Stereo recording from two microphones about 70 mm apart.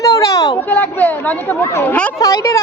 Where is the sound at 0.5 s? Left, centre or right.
Left.